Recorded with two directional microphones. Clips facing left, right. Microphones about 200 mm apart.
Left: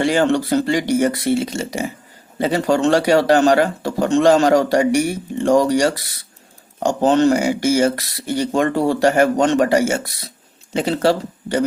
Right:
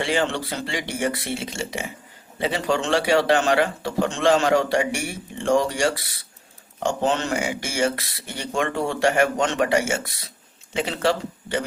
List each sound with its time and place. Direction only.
0.0 s a man's voice: 45° left (ahead or behind)